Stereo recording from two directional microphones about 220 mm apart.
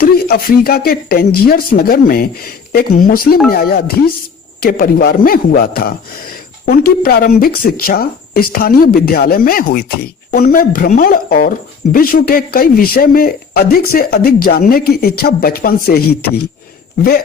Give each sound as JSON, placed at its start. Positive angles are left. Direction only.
{"t": 0.0, "sound": "speech", "side_deg": 45}